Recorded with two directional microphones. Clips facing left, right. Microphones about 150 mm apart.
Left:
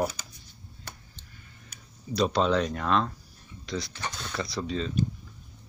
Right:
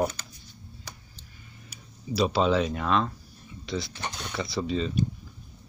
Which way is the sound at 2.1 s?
5° right (ahead or behind).